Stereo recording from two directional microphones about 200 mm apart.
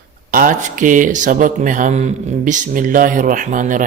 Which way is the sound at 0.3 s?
40° right (ahead or behind).